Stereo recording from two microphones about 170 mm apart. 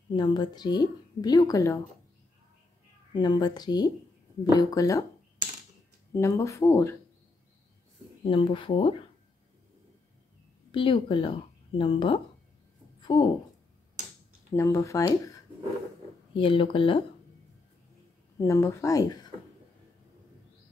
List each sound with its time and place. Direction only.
0.1 s a woman's voice: 25° left (ahead or behind)
3.1 s a woman's voice: 25° left (ahead or behind)
6.1 s speech: 15° left (ahead or behind)
8.2 s speech: 30° left (ahead or behind)
10.7 s a woman's voice: 30° left (ahead or behind)
14.5 s speech: 15° left (ahead or behind)
16.3 s speech: 30° left (ahead or behind)
18.4 s speech: 20° left (ahead or behind)